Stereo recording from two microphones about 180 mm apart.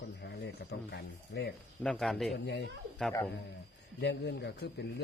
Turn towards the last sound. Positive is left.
turn(degrees=65)  # may be behind; listen again after turning